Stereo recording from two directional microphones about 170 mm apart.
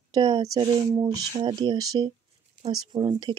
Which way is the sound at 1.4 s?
30° right (ahead or behind).